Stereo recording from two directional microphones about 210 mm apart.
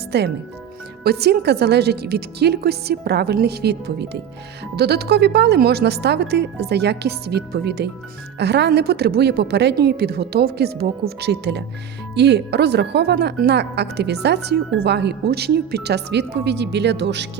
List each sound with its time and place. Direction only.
0.1 s speech: 50° right (ahead or behind)